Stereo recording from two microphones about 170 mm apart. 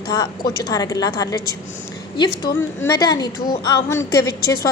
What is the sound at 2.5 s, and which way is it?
A woman's voice, 15° left (ahead or behind).